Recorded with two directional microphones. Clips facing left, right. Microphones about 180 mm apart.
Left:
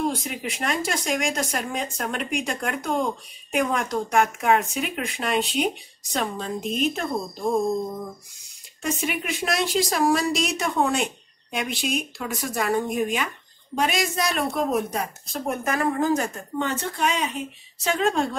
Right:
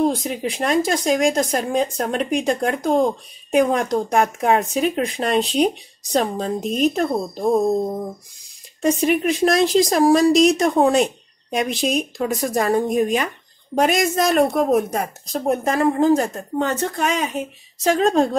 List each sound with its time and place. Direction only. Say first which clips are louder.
0.0 s speech: right 7 dB; 35° right (ahead or behind)
8.8 s a woman's voice: right 10 dB; 35° right (ahead or behind)